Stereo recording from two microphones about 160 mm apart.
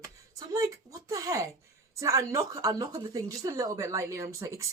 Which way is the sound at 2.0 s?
20° right (ahead or behind).